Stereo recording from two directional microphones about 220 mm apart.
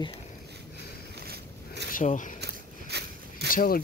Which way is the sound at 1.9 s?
35° left (ahead or behind).